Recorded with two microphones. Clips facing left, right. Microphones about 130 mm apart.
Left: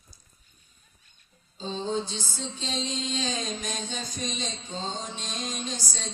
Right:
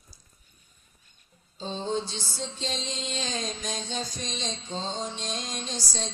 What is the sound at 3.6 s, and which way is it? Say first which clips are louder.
Music: right 1 dB; 50° left (ahead or behind).